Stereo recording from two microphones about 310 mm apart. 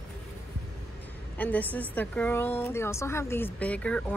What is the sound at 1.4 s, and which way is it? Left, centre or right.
A woman's voice, centre.